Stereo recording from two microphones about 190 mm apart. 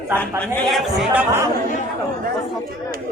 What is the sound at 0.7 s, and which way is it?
Speech, 5° right (ahead or behind).